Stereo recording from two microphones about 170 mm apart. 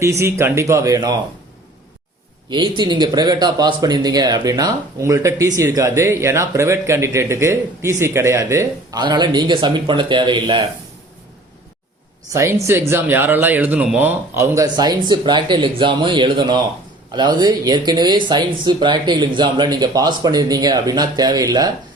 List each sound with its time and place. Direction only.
0.0 s speech: 15° right (ahead or behind)
2.5 s speech: 25° right (ahead or behind)
12.3 s speech: 15° right (ahead or behind)